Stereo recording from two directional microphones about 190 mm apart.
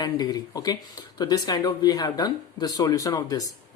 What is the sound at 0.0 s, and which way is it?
Speech, 20° left (ahead or behind).